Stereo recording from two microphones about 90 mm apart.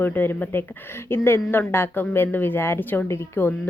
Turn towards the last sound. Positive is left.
turn(degrees=25)  # may be behind; listen again after turning